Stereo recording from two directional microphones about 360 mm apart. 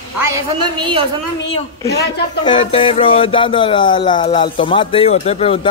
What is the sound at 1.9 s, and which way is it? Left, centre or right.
Speech, left.